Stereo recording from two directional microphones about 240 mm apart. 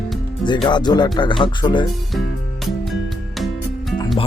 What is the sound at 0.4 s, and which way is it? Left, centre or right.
Speech, centre.